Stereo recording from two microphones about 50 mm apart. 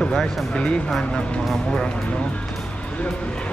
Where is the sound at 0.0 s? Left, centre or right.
Centre.